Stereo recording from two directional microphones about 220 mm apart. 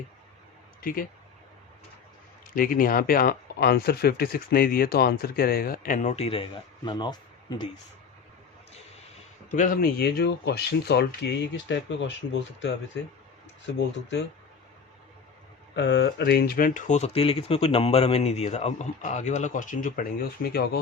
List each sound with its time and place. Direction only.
0.8 s speech: 40° left (ahead or behind)
2.6 s speech: 40° left (ahead or behind); by 7.2 s 20° left (ahead or behind)
9.5 s speech: 35° left (ahead or behind); by 13.8 s 55° left (ahead or behind)
15.7 s speech: 55° left (ahead or behind)